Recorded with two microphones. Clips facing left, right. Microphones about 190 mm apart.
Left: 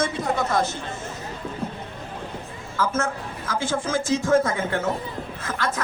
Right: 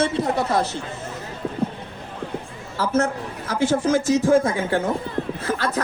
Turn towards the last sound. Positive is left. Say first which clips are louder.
# right 4 dB
turn(degrees=-35)  # may be behind; listen again after turning